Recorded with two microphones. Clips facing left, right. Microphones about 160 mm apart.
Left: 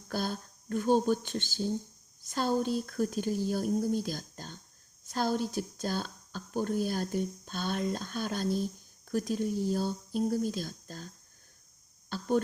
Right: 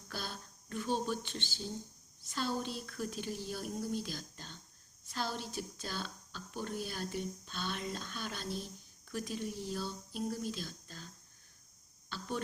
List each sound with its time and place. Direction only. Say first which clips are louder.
0.1 s speech: left 10 dB; 45° left (ahead or behind)